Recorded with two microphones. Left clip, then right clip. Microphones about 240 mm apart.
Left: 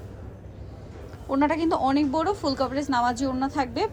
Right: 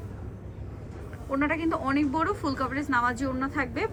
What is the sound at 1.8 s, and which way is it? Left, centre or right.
A woman's voice, centre.